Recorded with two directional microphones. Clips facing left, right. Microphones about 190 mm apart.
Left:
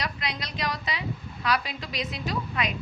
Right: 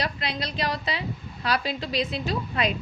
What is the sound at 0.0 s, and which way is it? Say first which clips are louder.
A woman's voice: right 4 dB; 30° right (ahead or behind).